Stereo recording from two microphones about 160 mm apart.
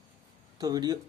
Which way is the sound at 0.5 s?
25° right (ahead or behind).